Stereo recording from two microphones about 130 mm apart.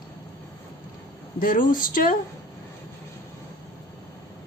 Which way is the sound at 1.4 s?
90° left.